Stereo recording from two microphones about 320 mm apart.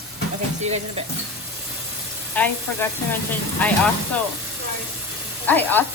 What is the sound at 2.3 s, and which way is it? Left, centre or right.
Speech, centre.